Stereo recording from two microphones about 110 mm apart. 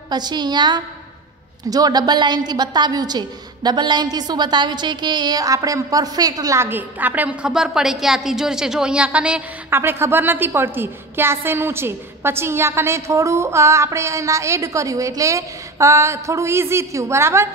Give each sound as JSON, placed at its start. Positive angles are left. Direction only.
{"t": 0.1, "sound": "a woman's voice", "side_deg": -40}
{"t": 9.7, "sound": "a woman's voice", "side_deg": -20}